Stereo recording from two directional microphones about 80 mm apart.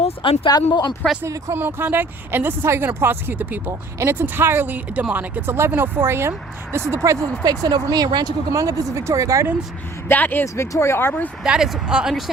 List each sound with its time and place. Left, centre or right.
0.2 s speech: left
0.5 s speech: left
1.5 s speech: right
6.9 s speech: right
10.1 s speech: left
10.4 s speech: left
11.4 s speech: centre